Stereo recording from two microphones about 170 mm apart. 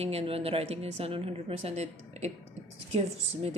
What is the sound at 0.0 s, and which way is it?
A woman's voice, 35° right (ahead or behind).